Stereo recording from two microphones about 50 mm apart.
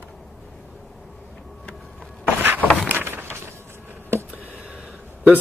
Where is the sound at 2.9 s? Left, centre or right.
Right.